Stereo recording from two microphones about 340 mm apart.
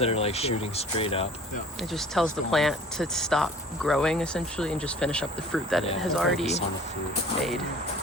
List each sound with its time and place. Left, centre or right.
0.0 s speech: centre
1.9 s speech: centre